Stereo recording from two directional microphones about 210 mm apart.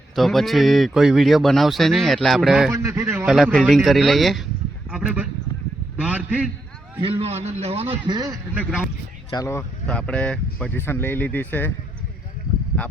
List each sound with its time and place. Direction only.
0.2 s speech: centre (ahead or behind)
2.7 s a man's voice: 15° right (ahead or behind)
3.2 s speech: centre (ahead or behind)
4.9 s a sound: 5° right (ahead or behind)
6.0 s a man's voice: 5° right (ahead or behind)
7.0 s a man's voice: 25° right (ahead or behind)
9.3 s speech: 15° left (ahead or behind)